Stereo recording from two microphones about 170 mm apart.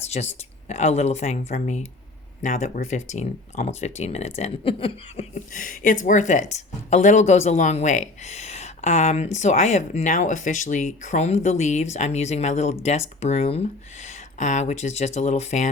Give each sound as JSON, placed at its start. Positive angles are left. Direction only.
{"t": 0.1, "sound": "speech", "side_deg": 40}
{"t": 5.5, "sound": "speech", "side_deg": 50}